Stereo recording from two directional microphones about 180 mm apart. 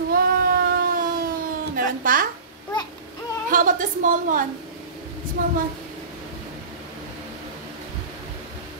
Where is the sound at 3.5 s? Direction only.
50° right (ahead or behind).